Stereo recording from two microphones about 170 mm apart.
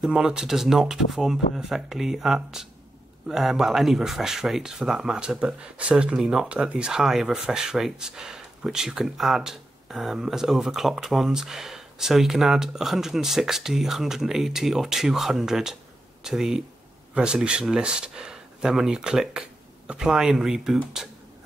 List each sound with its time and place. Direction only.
0.0 s speech: 5° right (ahead or behind)